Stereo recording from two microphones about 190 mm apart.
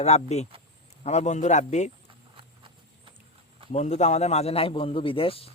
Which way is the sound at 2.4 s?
25° right (ahead or behind).